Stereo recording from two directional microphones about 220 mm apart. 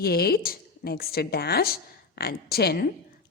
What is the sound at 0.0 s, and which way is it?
A woman's voice, 45° left (ahead or behind).